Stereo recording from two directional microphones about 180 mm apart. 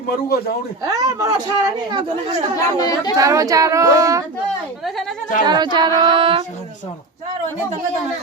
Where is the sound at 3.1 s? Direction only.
20° right (ahead or behind).